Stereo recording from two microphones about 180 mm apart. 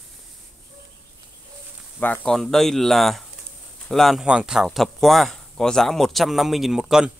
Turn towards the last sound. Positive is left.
turn(degrees=-5)  # may be behind; listen again after turning